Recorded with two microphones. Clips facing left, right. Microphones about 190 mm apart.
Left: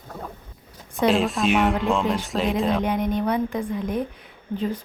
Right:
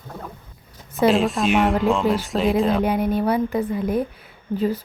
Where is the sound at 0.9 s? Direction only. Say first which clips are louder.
Right 3 dB; centre (ahead or behind).